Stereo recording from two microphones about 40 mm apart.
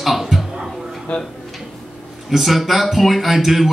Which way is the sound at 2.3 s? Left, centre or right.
Centre.